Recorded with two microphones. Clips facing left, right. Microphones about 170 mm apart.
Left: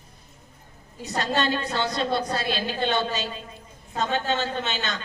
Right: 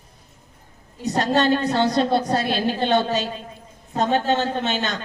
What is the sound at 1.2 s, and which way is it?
A woman's voice, 45° right (ahead or behind).